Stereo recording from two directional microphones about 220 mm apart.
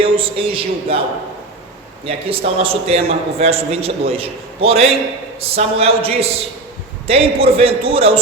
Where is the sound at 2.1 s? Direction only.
25° right (ahead or behind).